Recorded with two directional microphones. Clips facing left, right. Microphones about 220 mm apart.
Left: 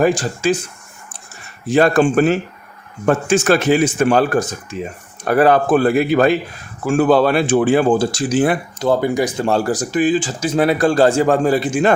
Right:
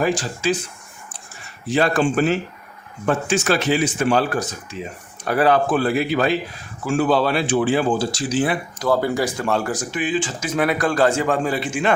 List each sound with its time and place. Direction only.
0.0 s speech: 45° left (ahead or behind)
1.6 s speech: 50° left (ahead or behind)
8.8 s speech: 20° left (ahead or behind)
9.5 s speech: 35° left (ahead or behind)